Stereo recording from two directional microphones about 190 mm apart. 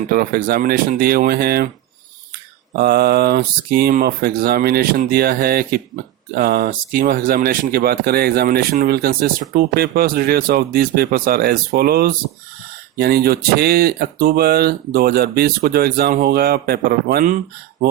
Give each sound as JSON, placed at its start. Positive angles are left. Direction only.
{"t": 0.1, "sound": "speech", "side_deg": -50}
{"t": 2.7, "sound": "speech", "side_deg": -55}